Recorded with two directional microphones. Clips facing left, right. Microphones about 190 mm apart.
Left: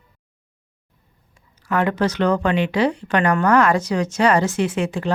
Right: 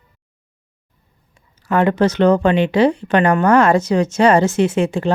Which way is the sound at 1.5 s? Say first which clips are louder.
Right 5 dB; 25° right (ahead or behind).